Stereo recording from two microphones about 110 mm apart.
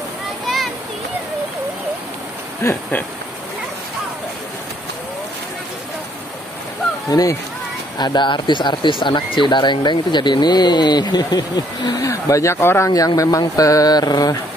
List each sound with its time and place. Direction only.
7.1 s speech: 35° left (ahead or behind)